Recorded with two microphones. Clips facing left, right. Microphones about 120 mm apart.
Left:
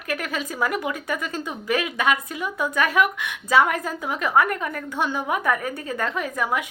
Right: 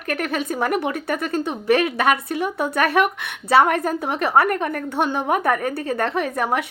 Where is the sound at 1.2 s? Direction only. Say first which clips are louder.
Right 6 dB; 55° right (ahead or behind).